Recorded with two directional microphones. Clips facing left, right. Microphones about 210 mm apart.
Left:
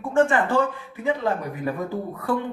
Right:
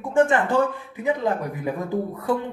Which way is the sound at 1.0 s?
15° right (ahead or behind).